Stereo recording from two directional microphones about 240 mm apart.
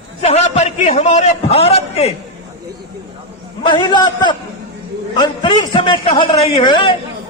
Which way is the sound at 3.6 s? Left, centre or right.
Centre.